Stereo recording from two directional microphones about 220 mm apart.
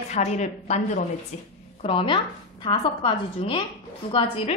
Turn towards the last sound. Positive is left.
turn(degrees=25)  # may be behind; listen again after turning